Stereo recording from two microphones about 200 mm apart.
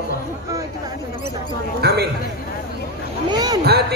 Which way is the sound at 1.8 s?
55° right (ahead or behind).